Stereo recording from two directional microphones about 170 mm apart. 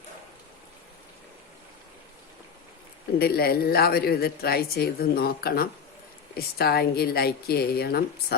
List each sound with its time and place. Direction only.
3.2 s a man's voice: 65° left (ahead or behind)